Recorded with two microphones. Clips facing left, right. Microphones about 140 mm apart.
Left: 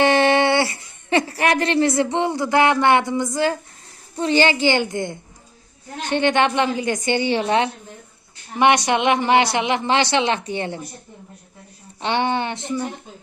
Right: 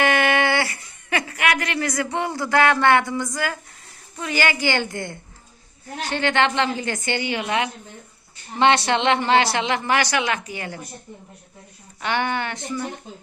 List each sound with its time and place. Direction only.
0.0 s a woman's voice: 30° left (ahead or behind)
8.5 s a woman's voice: 15° left (ahead or behind)
11.9 s a woman's voice: 20° left (ahead or behind)